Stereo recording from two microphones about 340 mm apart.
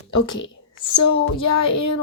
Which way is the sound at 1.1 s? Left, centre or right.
Centre.